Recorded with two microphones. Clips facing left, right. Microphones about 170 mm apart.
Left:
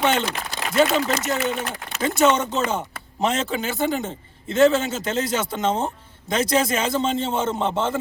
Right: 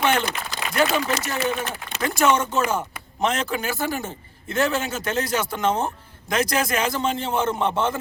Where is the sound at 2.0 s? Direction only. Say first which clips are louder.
Left 2 dB; 20° left (ahead or behind).